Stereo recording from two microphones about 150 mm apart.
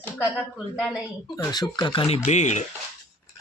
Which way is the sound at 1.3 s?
25° left (ahead or behind).